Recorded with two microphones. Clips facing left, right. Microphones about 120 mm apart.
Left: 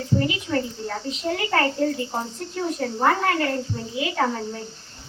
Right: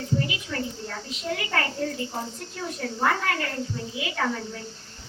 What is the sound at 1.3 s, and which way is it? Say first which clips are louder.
A woman's voice: left 5 dB; 35° left (ahead or behind).